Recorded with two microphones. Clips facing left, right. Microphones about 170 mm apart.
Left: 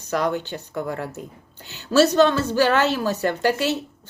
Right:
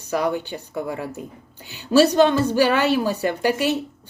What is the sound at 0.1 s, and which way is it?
A woman's voice, 10° right (ahead or behind).